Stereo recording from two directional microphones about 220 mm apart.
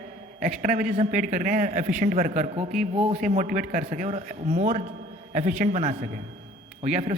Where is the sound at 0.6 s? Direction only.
35° right (ahead or behind).